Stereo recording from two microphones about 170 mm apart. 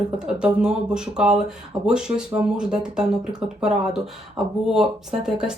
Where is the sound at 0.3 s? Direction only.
5° right (ahead or behind).